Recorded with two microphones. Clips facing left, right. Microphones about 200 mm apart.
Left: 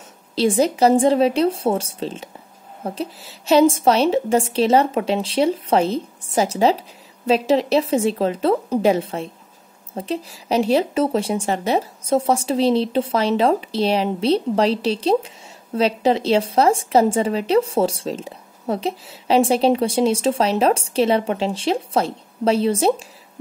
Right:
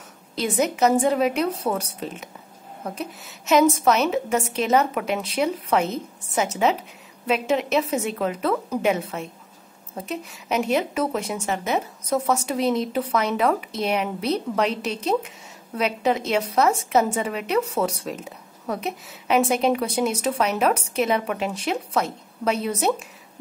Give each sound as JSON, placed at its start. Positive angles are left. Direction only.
{"t": 0.4, "sound": "a woman's voice", "side_deg": 30}